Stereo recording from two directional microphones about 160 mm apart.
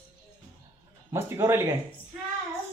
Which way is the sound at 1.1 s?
15° right (ahead or behind).